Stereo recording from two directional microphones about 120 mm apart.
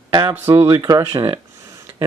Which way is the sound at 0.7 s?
35° right (ahead or behind).